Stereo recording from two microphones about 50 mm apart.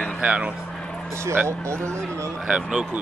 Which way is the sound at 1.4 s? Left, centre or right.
Right.